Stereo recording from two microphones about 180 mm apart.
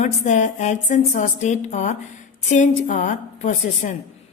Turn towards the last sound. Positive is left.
turn(degrees=45)  # may be behind; listen again after turning